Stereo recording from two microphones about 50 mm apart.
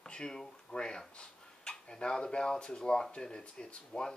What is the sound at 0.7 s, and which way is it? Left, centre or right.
Speech, centre.